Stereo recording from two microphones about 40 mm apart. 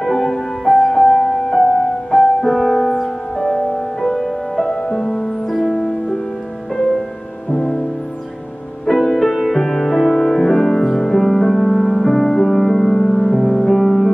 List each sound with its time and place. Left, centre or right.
0.0 s music: centre
7.5 s music: centre
8.8 s music: centre